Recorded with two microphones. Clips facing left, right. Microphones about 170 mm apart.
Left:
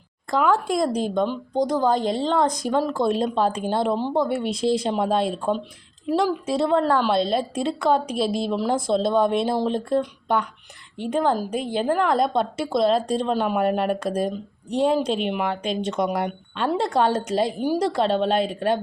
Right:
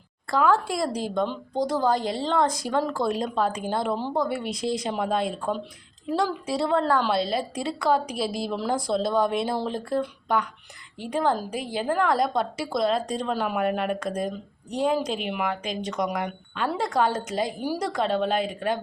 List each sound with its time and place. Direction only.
0.3 s speech: 15° left (ahead or behind)